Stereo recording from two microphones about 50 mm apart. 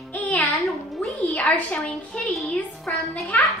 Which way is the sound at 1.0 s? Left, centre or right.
Left.